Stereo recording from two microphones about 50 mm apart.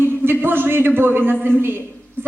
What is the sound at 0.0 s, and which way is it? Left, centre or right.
A man's voice, right.